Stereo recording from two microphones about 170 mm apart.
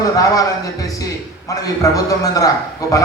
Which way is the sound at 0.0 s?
20° left (ahead or behind).